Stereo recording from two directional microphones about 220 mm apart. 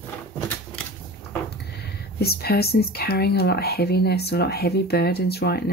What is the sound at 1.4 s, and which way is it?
Speech, 45° left (ahead or behind).